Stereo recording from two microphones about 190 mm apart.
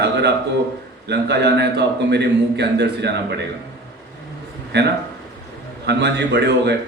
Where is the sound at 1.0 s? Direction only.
60° right (ahead or behind).